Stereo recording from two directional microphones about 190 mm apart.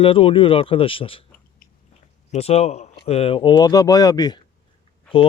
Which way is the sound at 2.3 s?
35° left (ahead or behind).